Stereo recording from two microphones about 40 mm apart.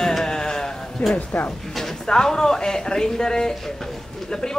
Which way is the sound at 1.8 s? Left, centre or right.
Centre.